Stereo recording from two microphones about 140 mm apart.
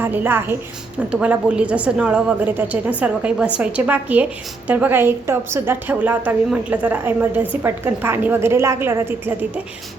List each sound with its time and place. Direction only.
0.0 s a woman's voice: 15° right (ahead or behind)